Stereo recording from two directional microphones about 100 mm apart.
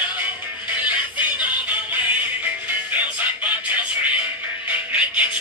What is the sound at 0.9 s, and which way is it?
Music, 15° right (ahead or behind).